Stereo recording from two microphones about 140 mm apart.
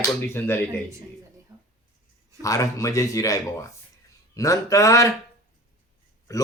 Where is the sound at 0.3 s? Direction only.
15° left (ahead or behind).